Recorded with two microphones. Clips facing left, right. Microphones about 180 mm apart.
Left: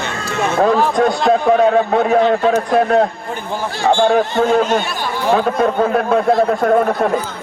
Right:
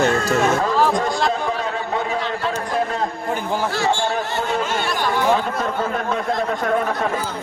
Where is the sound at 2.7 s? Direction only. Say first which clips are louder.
Left 9 dB; 70° left (ahead or behind).